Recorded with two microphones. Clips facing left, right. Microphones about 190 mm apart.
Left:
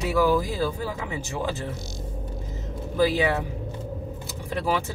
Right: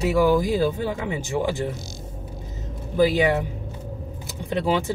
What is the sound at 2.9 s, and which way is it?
Speech, 20° right (ahead or behind).